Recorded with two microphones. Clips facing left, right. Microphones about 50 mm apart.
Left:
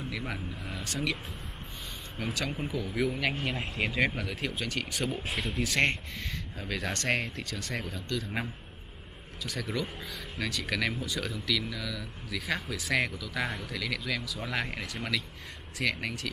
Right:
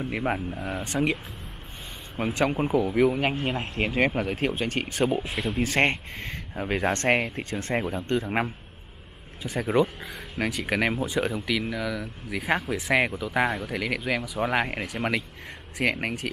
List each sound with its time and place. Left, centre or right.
0.1 s speech: right
2.1 s speech: right
5.3 s speech: centre
5.6 s speech: right
13.5 s speech: centre
13.7 s speech: right